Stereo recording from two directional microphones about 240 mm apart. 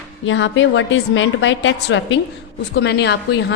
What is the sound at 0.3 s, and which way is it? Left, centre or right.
A woman's voice, left.